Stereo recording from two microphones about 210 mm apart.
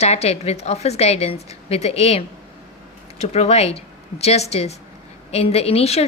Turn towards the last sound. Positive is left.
turn(degrees=30)  # may be behind; listen again after turning